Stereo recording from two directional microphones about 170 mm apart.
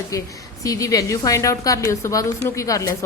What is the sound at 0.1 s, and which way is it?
A woman's voice, 20° left (ahead or behind).